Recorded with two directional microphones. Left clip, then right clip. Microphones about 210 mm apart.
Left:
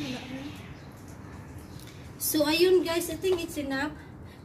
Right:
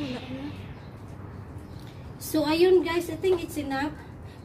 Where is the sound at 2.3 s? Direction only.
10° right (ahead or behind).